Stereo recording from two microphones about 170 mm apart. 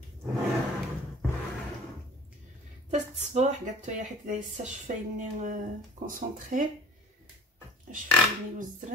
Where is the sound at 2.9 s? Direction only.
40° right (ahead or behind).